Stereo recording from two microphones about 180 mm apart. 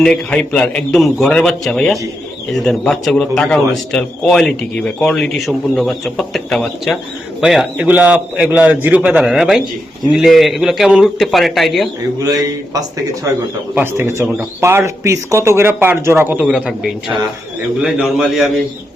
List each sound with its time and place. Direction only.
0.0 s a man's voice: 5° left (ahead or behind)
12.2 s a man's voice: 20° right (ahead or behind); by 18.5 s centre (ahead or behind)